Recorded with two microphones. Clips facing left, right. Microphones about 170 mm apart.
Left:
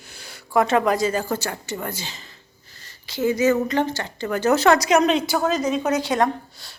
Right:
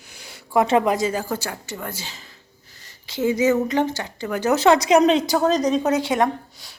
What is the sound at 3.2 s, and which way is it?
A woman's voice, 15° right (ahead or behind).